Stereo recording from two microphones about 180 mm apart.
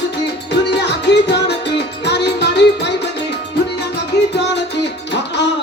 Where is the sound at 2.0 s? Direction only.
70° left (ahead or behind).